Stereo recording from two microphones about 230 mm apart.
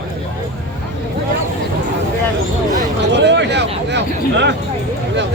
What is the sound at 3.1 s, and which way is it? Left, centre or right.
Speech, right.